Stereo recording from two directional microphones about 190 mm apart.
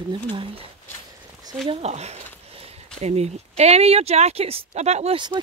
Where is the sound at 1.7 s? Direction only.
35° right (ahead or behind).